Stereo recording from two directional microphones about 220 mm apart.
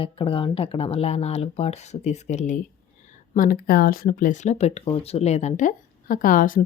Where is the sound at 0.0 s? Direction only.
25° left (ahead or behind).